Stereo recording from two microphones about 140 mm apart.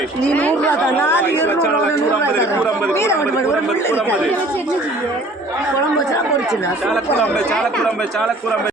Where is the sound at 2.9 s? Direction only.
20° left (ahead or behind).